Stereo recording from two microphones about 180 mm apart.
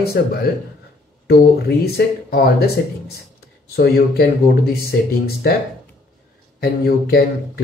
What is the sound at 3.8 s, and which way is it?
Speech, 60° left (ahead or behind).